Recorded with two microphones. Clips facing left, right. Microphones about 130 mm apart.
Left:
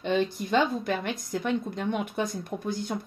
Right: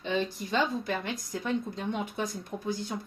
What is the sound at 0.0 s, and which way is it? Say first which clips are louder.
A woman's voice: left 4 dB; 60° left (ahead or behind).